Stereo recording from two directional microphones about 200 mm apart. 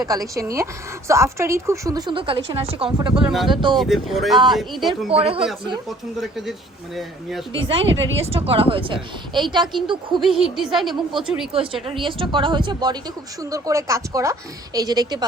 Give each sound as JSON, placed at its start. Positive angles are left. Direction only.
{"t": 0.0, "sound": "a woman's voice", "side_deg": -15}
{"t": 3.2, "sound": "a woman's voice", "side_deg": 0}
{"t": 3.5, "sound": "a woman's voice", "side_deg": -25}
{"t": 3.8, "sound": "a woman's voice", "side_deg": 0}
{"t": 5.1, "sound": "a woman's voice", "side_deg": -30}
{"t": 6.1, "sound": "a woman's voice", "side_deg": 0}
{"t": 7.9, "sound": "speech", "side_deg": -70}
{"t": 8.3, "sound": "a woman's voice", "side_deg": -30}
{"t": 10.2, "sound": "a woman's voice", "side_deg": 0}
{"t": 11.5, "sound": "a woman's voice", "side_deg": -25}